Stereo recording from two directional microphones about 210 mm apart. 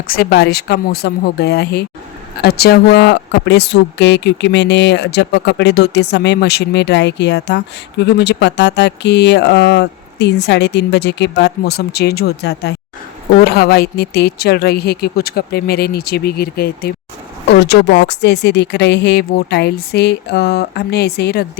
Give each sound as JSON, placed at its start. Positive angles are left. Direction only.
{"t": 0.1, "sound": "speech", "side_deg": 50}